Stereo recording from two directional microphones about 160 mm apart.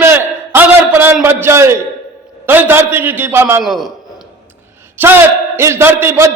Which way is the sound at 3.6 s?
Centre (ahead or behind).